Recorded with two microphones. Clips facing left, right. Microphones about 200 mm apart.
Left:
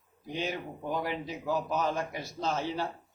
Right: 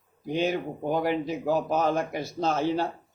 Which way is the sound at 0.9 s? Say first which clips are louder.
Right 7 dB; 50° right (ahead or behind).